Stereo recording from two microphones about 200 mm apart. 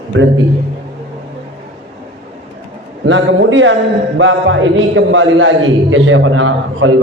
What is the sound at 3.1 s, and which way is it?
A man's voice, 65° right (ahead or behind).